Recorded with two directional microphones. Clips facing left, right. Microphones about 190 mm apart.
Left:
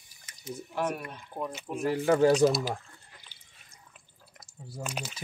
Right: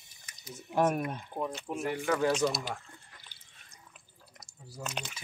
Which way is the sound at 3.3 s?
15° right (ahead or behind).